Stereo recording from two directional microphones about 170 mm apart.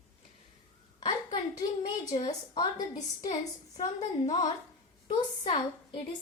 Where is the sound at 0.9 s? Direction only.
25° left (ahead or behind).